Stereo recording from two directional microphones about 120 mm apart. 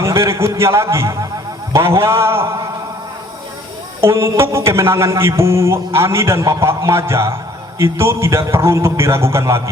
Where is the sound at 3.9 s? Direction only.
20° right (ahead or behind).